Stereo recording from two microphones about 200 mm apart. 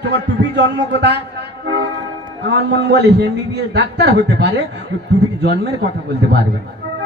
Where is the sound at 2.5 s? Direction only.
55° right (ahead or behind).